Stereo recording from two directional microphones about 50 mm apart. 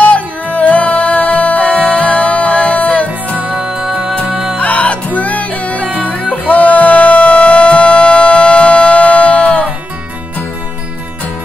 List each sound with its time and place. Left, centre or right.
0.0 s music: left
3.4 s music: centre
4.6 s music: left